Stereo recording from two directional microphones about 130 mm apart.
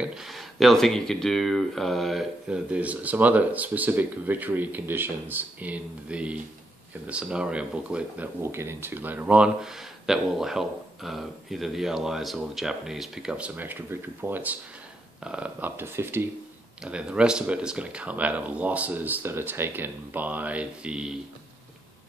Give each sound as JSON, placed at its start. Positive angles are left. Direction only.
{"t": 0.0, "sound": "speech", "side_deg": -5}
{"t": 8.4, "sound": "speech", "side_deg": -20}
{"t": 16.8, "sound": "speech", "side_deg": -5}